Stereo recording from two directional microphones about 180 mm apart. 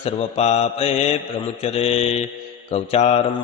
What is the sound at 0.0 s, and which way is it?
Mantra, 35° left (ahead or behind).